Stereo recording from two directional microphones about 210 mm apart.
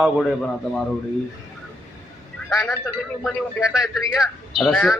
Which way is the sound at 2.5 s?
5° left (ahead or behind).